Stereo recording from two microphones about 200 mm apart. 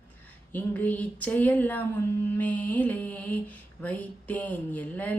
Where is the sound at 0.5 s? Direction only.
10° left (ahead or behind).